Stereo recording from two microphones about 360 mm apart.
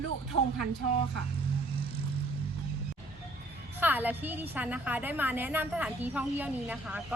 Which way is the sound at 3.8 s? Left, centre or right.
Centre.